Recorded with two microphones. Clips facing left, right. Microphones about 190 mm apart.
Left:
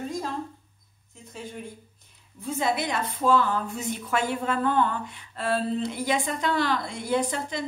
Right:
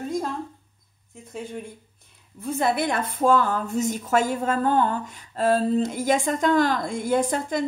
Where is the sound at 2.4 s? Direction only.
55° right (ahead or behind).